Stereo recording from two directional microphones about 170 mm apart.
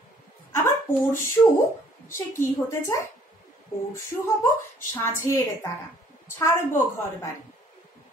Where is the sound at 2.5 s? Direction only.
15° left (ahead or behind).